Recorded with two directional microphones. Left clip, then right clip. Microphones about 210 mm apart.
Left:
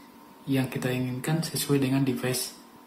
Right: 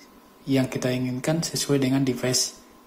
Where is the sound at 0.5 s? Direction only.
25° right (ahead or behind).